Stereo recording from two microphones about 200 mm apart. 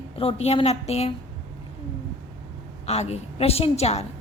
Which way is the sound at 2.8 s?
30° left (ahead or behind).